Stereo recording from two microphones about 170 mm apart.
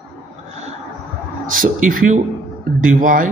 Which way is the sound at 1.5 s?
55° right (ahead or behind).